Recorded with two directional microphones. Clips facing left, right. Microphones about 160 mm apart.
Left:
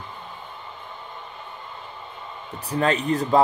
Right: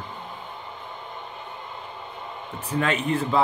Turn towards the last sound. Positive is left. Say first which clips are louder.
# left 3 dB
turn(degrees=40)  # may be behind; listen again after turning